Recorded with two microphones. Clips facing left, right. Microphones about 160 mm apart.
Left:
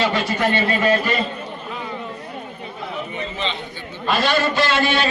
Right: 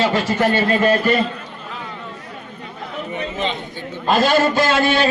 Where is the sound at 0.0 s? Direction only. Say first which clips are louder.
Right 3 dB; 40° right (ahead or behind).